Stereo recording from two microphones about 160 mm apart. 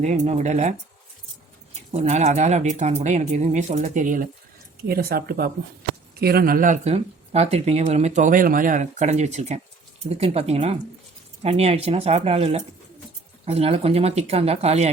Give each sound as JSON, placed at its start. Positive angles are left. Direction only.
{"t": 0.0, "sound": "speech", "side_deg": -45}
{"t": 1.9, "sound": "speech", "side_deg": -45}
{"t": 4.9, "sound": "speech", "side_deg": -70}
{"t": 6.8, "sound": "speech", "side_deg": -40}